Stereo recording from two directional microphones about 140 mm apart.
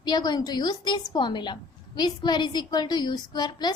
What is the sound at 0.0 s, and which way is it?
A woman's voice, 30° left (ahead or behind).